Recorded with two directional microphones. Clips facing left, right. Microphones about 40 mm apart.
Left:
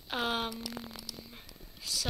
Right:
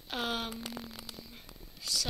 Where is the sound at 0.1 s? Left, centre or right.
Centre.